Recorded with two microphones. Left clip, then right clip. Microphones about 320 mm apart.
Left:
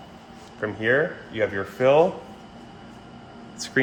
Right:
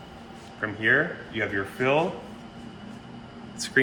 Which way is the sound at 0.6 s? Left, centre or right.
Left.